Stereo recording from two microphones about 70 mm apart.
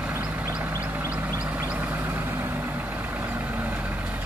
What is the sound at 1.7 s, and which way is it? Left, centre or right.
Vehicle, right.